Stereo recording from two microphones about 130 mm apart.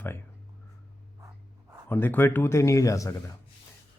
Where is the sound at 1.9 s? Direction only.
15° left (ahead or behind).